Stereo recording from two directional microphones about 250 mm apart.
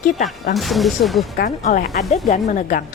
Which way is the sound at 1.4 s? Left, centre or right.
Left.